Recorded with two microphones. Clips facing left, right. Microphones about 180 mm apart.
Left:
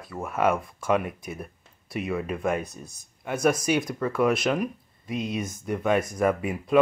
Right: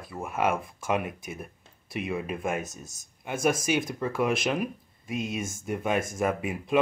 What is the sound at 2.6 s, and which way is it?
Speech, 45° right (ahead or behind).